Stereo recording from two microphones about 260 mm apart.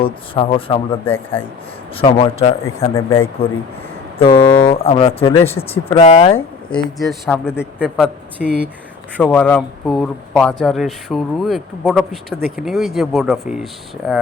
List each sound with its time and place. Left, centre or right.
0.0 s speech: centre
1.0 s speech: centre
2.0 s speech: left
2.9 s speech: centre
4.4 s speech: centre
6.3 s speech: centre